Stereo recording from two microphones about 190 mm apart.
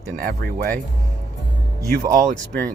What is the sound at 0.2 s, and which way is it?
Speech, 50° right (ahead or behind).